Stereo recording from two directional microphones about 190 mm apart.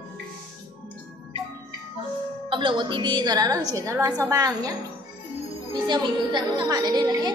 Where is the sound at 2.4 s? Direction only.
25° right (ahead or behind).